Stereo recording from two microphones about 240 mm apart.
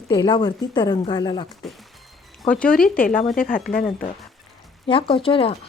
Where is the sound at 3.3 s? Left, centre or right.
Left.